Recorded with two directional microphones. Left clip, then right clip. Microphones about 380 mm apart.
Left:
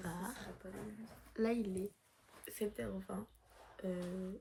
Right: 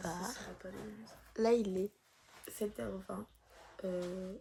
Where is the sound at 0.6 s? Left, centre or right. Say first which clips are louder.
Right 3 dB; right.